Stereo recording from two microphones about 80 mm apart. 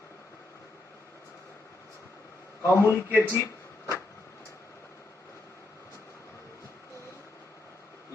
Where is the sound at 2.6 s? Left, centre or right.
Left.